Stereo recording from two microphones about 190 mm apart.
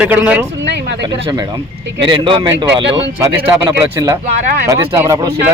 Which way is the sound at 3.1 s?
15° right (ahead or behind).